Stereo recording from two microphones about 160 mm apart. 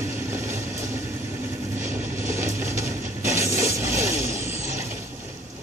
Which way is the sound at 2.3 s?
15° right (ahead or behind).